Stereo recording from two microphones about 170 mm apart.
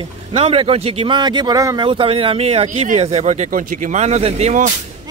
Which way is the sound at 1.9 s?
30° right (ahead or behind).